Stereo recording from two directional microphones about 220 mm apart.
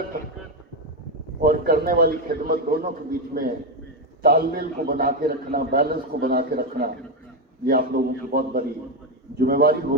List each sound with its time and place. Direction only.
1.4 s a man's voice: 40° right (ahead or behind)